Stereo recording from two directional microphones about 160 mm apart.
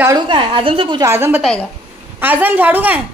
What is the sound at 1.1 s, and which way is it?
Speech, 15° right (ahead or behind).